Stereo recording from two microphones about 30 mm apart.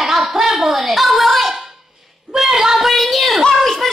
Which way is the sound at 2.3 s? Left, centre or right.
Centre.